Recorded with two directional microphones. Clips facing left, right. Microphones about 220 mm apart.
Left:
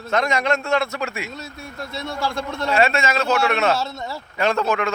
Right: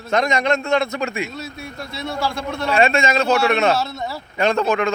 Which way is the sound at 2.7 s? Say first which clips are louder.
Right 2 dB; 25° right (ahead or behind).